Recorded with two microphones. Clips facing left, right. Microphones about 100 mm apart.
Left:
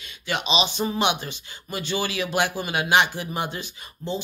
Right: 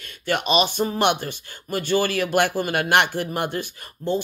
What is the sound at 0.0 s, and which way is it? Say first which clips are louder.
Speech: right 4 dB; 50° right (ahead or behind).